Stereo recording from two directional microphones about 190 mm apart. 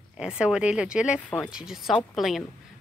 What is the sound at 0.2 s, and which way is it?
A woman's voice, 5° right (ahead or behind).